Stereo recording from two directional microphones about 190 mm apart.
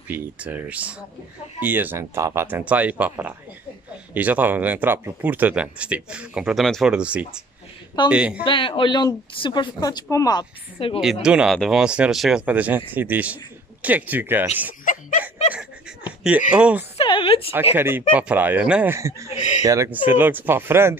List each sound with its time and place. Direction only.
0.1 s speech: 10° right (ahead or behind)
8.5 s speech: 25° left (ahead or behind)
11.2 s speech: 5° right (ahead or behind)
16.3 s speech: 5° right (ahead or behind)
16.9 s a sound: 30° left (ahead or behind)
17.7 s speech: 10° right (ahead or behind)
19.3 s a sound: 35° left (ahead or behind)
19.6 s speech: 15° right (ahead or behind)